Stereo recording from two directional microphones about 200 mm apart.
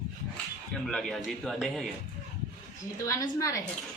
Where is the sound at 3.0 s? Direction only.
15° left (ahead or behind).